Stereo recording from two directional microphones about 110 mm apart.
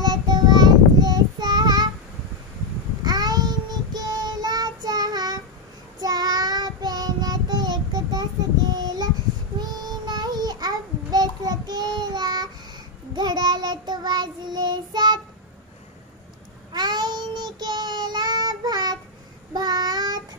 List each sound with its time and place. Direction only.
0.0 s child singing: 40° right (ahead or behind)
3.0 s child singing: 40° right (ahead or behind)
16.7 s child singing: 40° right (ahead or behind)